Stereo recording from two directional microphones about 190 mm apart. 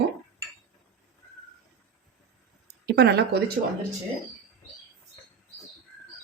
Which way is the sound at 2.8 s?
60° right (ahead or behind).